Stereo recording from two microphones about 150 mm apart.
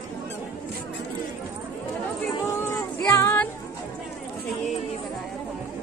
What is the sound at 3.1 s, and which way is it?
Music, 15° left (ahead or behind).